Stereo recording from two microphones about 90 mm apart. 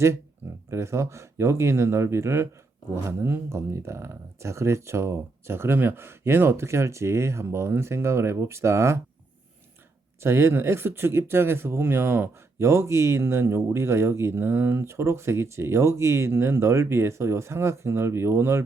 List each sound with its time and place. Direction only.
0.7 s speech: 30° right (ahead or behind)
10.2 s speech: 30° right (ahead or behind)